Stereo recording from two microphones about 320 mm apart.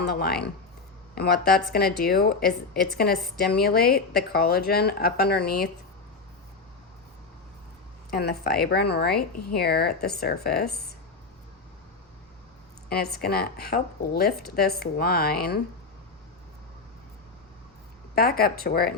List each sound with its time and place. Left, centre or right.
0.0 s speech: left
8.1 s speech: left
12.9 s speech: left
18.1 s speech: left